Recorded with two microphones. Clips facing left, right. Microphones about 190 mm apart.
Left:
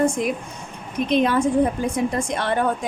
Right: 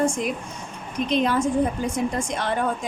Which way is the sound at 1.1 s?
55° left (ahead or behind).